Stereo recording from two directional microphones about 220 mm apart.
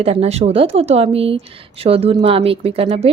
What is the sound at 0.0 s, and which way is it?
Speech, 25° right (ahead or behind).